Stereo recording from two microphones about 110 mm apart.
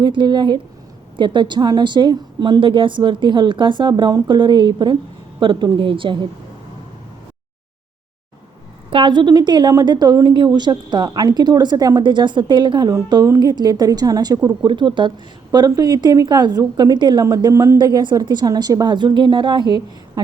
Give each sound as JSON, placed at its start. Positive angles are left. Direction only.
{"t": 0.0, "sound": "a woman's voice", "side_deg": -45}
{"t": 8.9, "sound": "a woman's voice", "side_deg": -50}
{"t": 15.5, "sound": "a woman's voice", "side_deg": -35}
{"t": 17.2, "sound": "speech", "side_deg": -30}
{"t": 17.7, "sound": "a woman's voice", "side_deg": -40}